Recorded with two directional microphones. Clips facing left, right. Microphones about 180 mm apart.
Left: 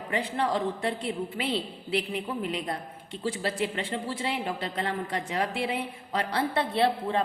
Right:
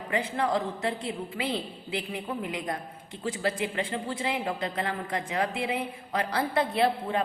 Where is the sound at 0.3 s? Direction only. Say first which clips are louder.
Left 1 dB; 30° left (ahead or behind).